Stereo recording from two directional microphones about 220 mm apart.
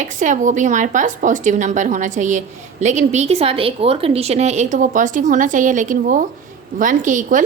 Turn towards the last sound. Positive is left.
turn(degrees=-35)  # may be behind; listen again after turning